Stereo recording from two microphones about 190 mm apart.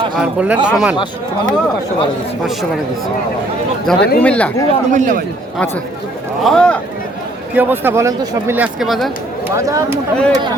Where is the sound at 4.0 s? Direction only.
55° left (ahead or behind).